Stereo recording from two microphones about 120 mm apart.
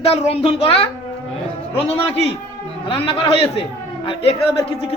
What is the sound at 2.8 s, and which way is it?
Speech, 50° left (ahead or behind).